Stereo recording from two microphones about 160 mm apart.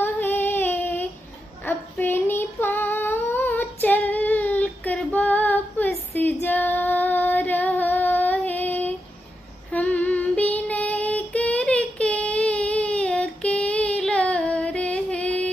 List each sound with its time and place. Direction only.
0.0 s female singing: 10° left (ahead or behind)
1.6 s child singing: 15° left (ahead or behind)
9.7 s female singing: 10° left (ahead or behind)